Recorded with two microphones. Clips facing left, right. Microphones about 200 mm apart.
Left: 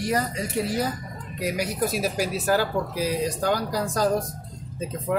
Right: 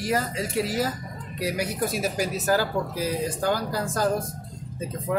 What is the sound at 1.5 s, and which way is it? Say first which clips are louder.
Speech: left 2 dB; 50° right (ahead or behind).